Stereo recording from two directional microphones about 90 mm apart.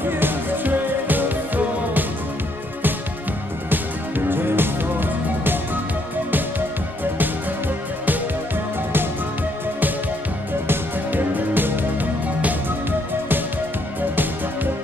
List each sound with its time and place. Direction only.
0.0 s music: 25° right (ahead or behind)
4.3 s music: 25° right (ahead or behind)
10.7 s music: 20° right (ahead or behind)